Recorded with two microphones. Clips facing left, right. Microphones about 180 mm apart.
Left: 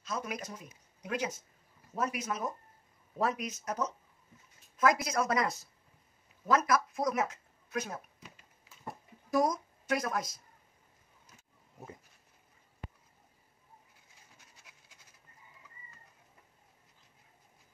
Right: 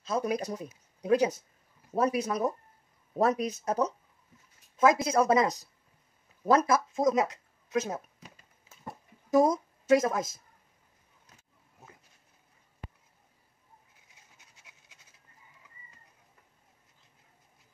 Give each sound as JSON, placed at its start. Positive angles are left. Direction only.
{"t": 0.0, "sound": "a woman's voice", "side_deg": -30}
{"t": 9.3, "sound": "a woman's voice", "side_deg": -25}